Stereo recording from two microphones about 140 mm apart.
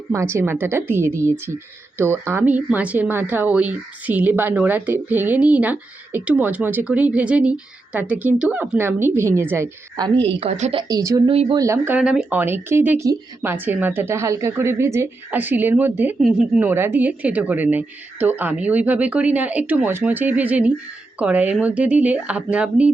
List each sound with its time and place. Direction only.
0.1 s speech: 20° right (ahead or behind)
10.0 s a woman's voice: 35° right (ahead or behind)
10.8 s speech: 25° right (ahead or behind)
11.3 s a woman's voice: 40° right (ahead or behind)
11.5 s speech: 20° right (ahead or behind)
11.9 s speech: 5° right (ahead or behind)